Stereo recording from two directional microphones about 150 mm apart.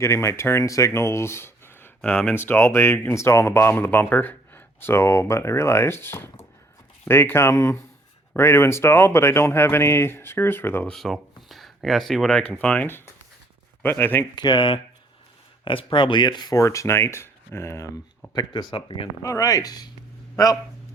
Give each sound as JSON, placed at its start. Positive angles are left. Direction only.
{"t": 0.0, "sound": "speech", "side_deg": 20}
{"t": 10.9, "sound": "speech", "side_deg": 0}
{"t": 11.4, "sound": "a sound", "side_deg": 0}
{"t": 12.6, "sound": "speech", "side_deg": 10}
{"t": 14.3, "sound": "speech", "side_deg": 30}
{"t": 18.3, "sound": "speech", "side_deg": 30}
{"t": 19.2, "sound": "speech", "side_deg": 20}